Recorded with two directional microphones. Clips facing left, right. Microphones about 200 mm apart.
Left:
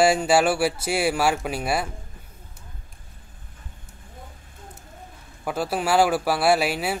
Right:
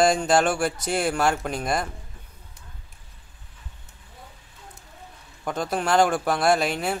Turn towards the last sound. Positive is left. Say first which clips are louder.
# left 1 dB
turn(degrees=5)  # may be behind; listen again after turning